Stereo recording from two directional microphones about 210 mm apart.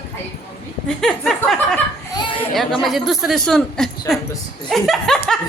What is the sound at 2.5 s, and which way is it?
A woman's voice, centre (ahead or behind).